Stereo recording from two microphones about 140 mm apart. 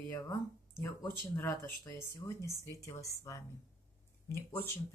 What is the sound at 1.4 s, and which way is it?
Speech, 20° left (ahead or behind).